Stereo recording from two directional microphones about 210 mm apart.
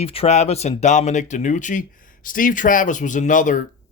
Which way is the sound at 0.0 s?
30° left (ahead or behind).